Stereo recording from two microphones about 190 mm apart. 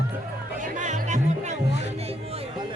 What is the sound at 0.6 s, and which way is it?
Music, 40° right (ahead or behind).